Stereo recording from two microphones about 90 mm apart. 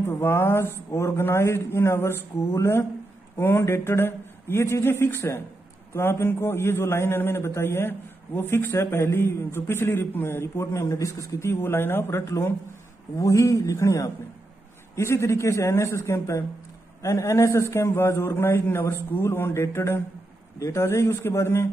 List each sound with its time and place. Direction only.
0.0 s a man's voice: 25° left (ahead or behind)